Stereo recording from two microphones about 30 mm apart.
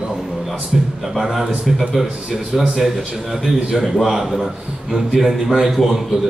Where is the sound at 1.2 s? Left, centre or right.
Centre.